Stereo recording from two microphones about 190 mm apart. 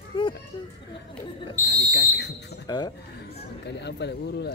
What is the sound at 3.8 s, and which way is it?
Speech, 65° left (ahead or behind).